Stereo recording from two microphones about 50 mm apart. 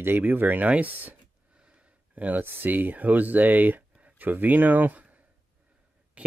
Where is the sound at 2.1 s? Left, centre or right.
Right.